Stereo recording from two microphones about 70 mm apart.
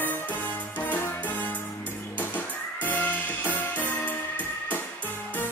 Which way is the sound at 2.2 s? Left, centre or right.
Left.